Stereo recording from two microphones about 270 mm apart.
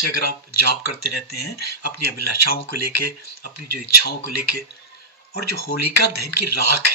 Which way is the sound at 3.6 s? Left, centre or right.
Left.